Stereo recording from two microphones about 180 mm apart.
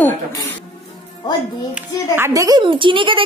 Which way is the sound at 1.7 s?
10° right (ahead or behind).